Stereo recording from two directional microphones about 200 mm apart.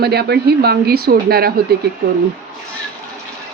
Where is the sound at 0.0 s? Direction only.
55° right (ahead or behind).